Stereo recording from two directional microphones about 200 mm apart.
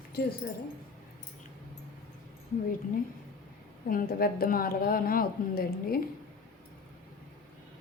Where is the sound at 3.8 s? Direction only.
45° left (ahead or behind).